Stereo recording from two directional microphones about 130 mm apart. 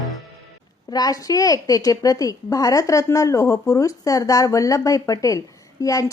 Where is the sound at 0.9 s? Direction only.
30° left (ahead or behind).